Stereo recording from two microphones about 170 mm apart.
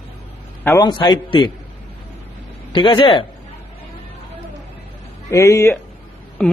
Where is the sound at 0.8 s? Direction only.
25° left (ahead or behind).